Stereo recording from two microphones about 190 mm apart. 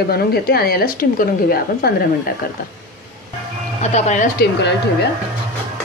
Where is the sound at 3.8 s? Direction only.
35° left (ahead or behind).